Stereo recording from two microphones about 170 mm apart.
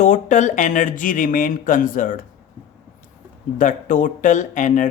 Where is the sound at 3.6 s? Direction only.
50° left (ahead or behind).